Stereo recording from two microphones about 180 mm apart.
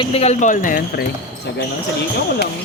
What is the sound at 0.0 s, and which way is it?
Speech, 35° left (ahead or behind).